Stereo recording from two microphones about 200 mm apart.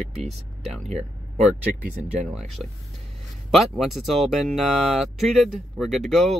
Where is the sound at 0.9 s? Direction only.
35° right (ahead or behind).